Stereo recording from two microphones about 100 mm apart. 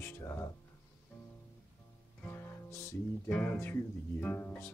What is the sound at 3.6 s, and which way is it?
Speech, 20° left (ahead or behind).